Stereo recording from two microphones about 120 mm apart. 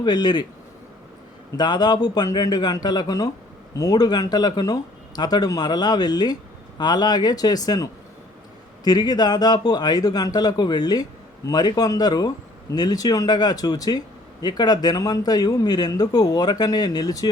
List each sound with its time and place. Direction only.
0.0 s speech: 35° left (ahead or behind)
1.5 s speech: 35° left (ahead or behind)